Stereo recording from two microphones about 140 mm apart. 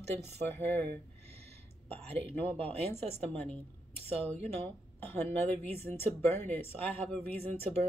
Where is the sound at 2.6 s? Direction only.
50° right (ahead or behind).